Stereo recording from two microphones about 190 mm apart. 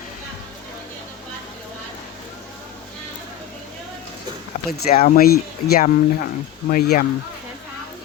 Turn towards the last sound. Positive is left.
turn(degrees=50)  # may be behind; listen again after turning